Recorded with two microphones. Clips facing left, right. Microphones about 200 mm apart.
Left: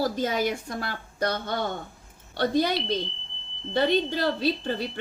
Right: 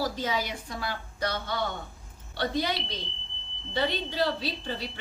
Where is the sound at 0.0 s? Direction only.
50° left (ahead or behind).